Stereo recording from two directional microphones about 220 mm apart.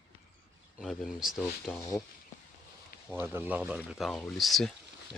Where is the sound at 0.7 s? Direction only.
Centre (ahead or behind).